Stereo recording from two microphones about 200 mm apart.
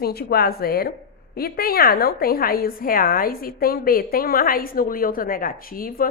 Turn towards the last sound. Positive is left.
turn(degrees=45)  # may be behind; listen again after turning